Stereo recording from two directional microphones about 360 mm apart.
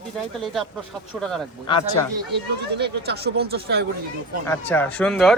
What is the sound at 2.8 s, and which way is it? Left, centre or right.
Speech, right.